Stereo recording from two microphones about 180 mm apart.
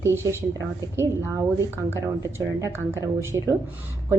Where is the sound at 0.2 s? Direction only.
15° right (ahead or behind).